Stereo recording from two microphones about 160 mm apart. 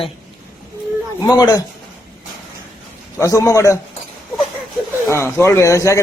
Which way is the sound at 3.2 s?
20° left (ahead or behind).